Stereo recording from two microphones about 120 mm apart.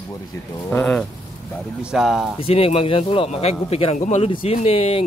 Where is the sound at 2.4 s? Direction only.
55° left (ahead or behind).